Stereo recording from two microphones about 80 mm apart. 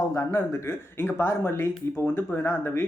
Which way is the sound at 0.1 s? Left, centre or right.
Left.